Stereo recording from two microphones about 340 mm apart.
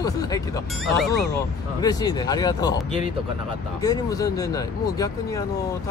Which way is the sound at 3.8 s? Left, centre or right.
Centre.